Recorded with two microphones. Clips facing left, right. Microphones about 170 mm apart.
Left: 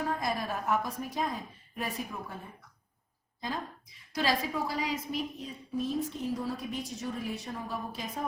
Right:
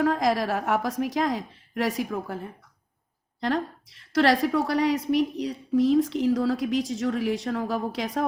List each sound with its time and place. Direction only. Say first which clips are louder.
0.0 s a woman's voice: right 9 dB; 90° right